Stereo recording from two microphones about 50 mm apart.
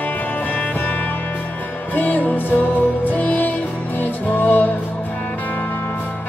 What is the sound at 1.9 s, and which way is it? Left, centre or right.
Music, left.